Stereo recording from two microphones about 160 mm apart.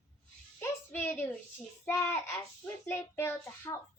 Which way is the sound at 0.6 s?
15° left (ahead or behind).